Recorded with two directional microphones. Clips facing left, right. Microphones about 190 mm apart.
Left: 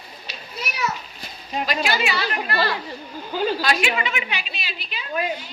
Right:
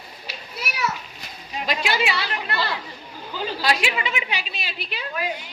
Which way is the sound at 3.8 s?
35° right (ahead or behind).